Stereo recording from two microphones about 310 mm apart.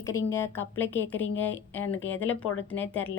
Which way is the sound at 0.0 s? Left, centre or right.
Centre.